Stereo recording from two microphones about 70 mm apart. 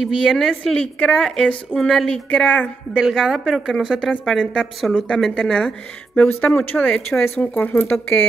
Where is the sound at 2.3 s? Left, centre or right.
Centre.